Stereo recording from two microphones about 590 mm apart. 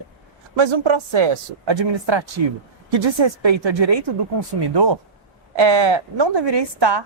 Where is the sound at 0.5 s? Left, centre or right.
Right.